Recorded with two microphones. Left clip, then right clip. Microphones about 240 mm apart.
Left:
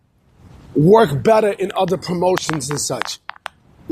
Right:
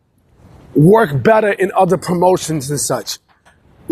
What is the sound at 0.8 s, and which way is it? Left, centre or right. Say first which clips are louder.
A man's voice: right 1 dB; centre.